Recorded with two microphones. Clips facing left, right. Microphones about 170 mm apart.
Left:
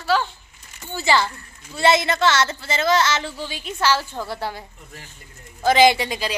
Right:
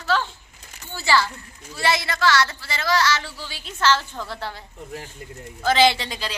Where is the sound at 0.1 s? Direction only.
10° left (ahead or behind).